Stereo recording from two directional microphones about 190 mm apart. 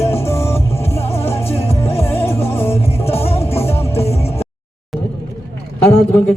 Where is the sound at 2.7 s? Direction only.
30° left (ahead or behind).